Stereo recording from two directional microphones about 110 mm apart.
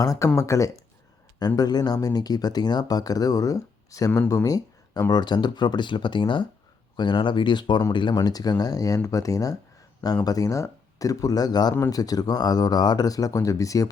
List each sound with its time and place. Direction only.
0.0 s speech: 30° left (ahead or behind)